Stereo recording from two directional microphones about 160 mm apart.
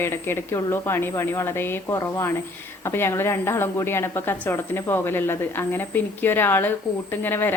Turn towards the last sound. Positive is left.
turn(degrees=10)  # may be behind; listen again after turning